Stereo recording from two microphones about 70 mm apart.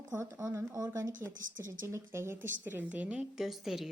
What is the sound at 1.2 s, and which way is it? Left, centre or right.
Speech, right.